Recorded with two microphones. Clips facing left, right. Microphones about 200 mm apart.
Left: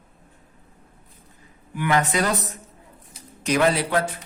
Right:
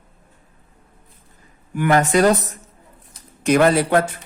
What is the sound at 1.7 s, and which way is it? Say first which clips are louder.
Speech: right 6 dB; 45° right (ahead or behind).